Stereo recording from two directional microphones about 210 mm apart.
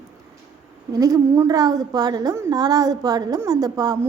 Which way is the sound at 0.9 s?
15° right (ahead or behind).